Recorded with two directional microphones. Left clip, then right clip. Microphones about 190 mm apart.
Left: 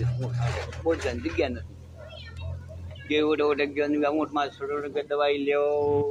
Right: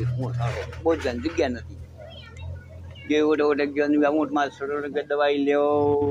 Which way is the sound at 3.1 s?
25° right (ahead or behind).